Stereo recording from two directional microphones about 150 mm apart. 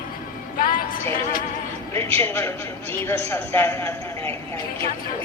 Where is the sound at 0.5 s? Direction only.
65° left (ahead or behind).